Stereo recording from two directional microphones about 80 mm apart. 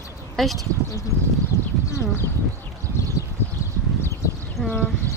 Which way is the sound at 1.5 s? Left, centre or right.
Left.